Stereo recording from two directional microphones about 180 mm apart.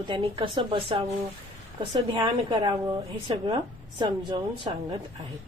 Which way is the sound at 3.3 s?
20° right (ahead or behind).